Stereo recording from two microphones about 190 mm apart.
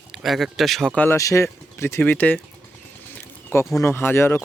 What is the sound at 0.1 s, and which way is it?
Speech, centre (ahead or behind).